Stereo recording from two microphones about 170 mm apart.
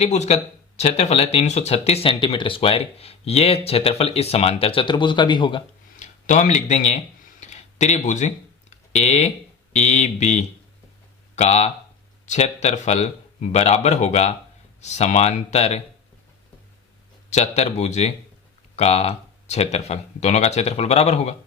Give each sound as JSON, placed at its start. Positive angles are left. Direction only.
{"t": 0.0, "sound": "speech", "side_deg": 40}
{"t": 6.0, "sound": "a sound", "side_deg": 45}
{"t": 9.7, "sound": "speech", "side_deg": 40}
{"t": 17.2, "sound": "speech", "side_deg": 40}